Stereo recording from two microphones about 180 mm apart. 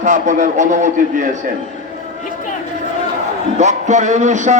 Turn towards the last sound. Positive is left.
turn(degrees=-40)  # may be behind; listen again after turning